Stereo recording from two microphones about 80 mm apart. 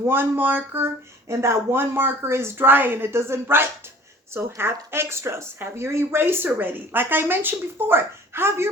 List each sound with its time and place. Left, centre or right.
0.0 s speech: right
1.3 s speech: right